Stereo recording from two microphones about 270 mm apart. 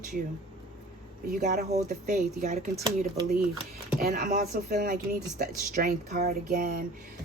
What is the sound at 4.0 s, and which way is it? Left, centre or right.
A woman's voice, right.